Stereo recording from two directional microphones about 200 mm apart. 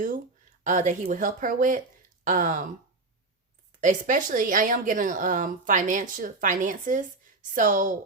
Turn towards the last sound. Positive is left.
turn(degrees=-40)  # may be behind; listen again after turning